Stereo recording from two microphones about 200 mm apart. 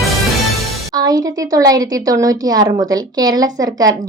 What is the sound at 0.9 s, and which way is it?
A woman's voice, 20° right (ahead or behind).